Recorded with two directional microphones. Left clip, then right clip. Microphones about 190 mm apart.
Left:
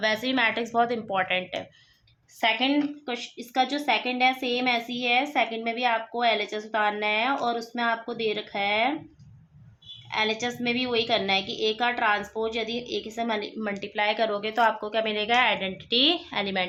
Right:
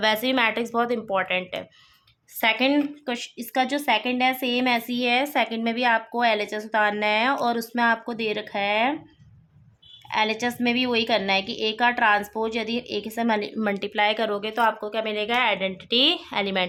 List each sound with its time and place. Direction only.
0.0 s speech: 35° right (ahead or behind); by 1.6 s 20° right (ahead or behind)
2.4 s a woman's voice: 45° right (ahead or behind)
10.1 s a woman's voice: 45° right (ahead or behind); by 16.6 s 30° right (ahead or behind)